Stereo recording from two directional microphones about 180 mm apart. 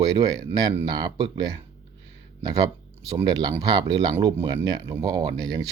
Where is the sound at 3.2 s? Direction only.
25° right (ahead or behind).